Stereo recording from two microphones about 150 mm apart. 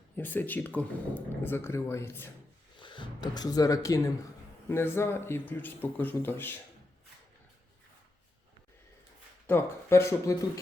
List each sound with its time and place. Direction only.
0.2 s speech: 10° left (ahead or behind)
2.7 s speech: 35° left (ahead or behind); by 6.6 s 15° left (ahead or behind)
9.5 s speech: 15° left (ahead or behind)